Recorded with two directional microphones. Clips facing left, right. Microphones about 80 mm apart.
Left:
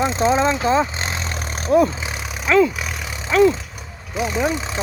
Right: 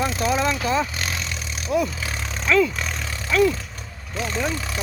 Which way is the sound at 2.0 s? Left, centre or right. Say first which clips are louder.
Left 1 dB; centre.